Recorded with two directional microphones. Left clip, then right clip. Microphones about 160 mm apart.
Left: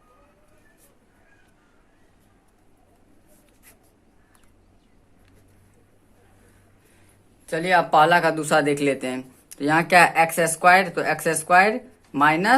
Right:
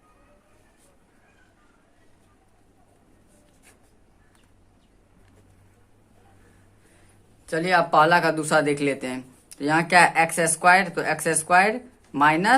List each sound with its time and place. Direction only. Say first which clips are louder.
7.5 s speech: left 1 dB; 10° left (ahead or behind)